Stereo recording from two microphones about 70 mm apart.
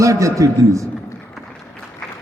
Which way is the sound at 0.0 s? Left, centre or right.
Right.